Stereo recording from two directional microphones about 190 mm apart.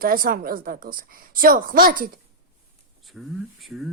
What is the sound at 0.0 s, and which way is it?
A woman's voice, 50° right (ahead or behind).